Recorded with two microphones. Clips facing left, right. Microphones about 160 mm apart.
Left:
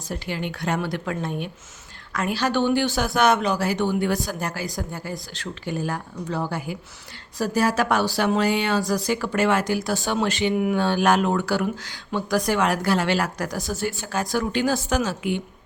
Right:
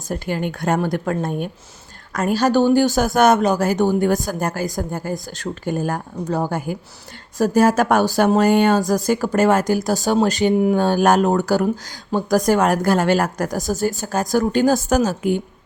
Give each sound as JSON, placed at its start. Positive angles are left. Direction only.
{"t": 0.1, "sound": "a woman's voice", "side_deg": -45}